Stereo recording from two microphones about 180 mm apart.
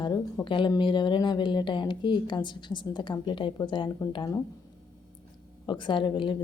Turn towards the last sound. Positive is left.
turn(degrees=25)  # may be behind; listen again after turning